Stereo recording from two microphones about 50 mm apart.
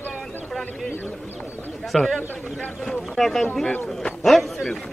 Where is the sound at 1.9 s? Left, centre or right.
Centre.